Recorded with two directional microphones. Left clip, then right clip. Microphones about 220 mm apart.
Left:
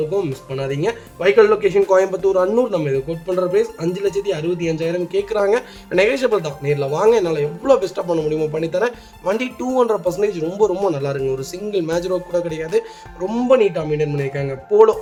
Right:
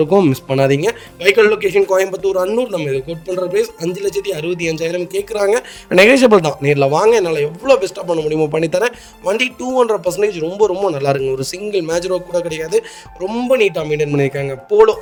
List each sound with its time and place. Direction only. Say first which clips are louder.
0.1 s speech: right 9 dB; 45° right (ahead or behind)
2.1 s speech: even; 5° right (ahead or behind)
2.8 s speech: right 1 dB; 45° right (ahead or behind); by 10.9 s 25° right (ahead or behind)
10.9 s speech: right 5 dB; 35° right (ahead or behind)
13.6 s speech: right 2 dB; 45° right (ahead or behind)